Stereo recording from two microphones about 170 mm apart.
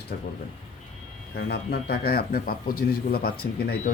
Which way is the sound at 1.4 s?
65° left (ahead or behind).